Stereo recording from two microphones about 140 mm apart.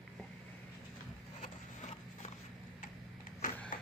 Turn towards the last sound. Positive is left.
turn(degrees=75)  # may be behind; listen again after turning